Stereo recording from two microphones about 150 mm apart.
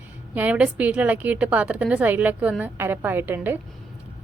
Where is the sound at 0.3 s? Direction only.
10° right (ahead or behind).